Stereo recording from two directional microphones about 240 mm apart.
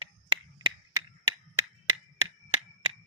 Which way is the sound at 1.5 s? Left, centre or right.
Centre.